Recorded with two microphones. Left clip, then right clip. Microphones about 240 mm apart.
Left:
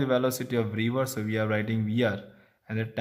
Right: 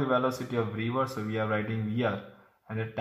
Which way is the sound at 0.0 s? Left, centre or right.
Left.